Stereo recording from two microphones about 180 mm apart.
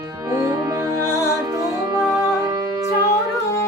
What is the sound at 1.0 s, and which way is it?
Music, 15° left (ahead or behind).